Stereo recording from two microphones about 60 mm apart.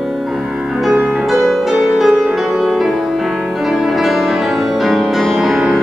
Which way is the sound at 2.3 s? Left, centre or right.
Centre.